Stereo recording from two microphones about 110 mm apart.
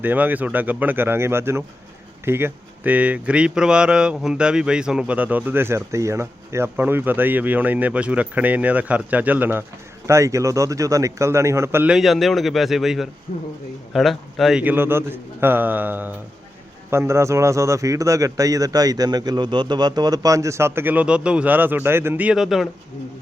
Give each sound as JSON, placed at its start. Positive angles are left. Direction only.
{"t": 0.0, "sound": "speech", "side_deg": -15}
{"t": 10.1, "sound": "a man's voice", "side_deg": -30}
{"t": 11.9, "sound": "a man's voice", "side_deg": 0}
{"t": 13.3, "sound": "speech", "side_deg": 90}
{"t": 13.9, "sound": "a man's voice", "side_deg": 0}
{"t": 14.6, "sound": "a man's voice", "side_deg": -20}
{"t": 22.3, "sound": "a man's voice", "side_deg": -5}